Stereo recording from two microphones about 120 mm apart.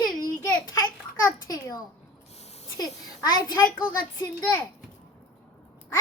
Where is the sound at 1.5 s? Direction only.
30° left (ahead or behind).